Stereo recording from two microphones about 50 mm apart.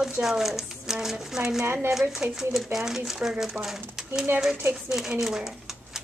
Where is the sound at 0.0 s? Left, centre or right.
Centre.